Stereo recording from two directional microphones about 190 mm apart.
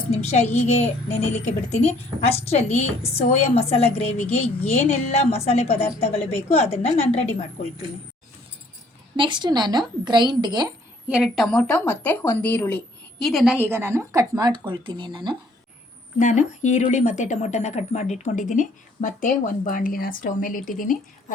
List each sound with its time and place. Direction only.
0.1 s speech: 35° left (ahead or behind)
9.1 s speech: 25° right (ahead or behind)
11.1 s speech: centre (ahead or behind); by 15.4 s 25° right (ahead or behind)
16.1 s speech: 40° left (ahead or behind)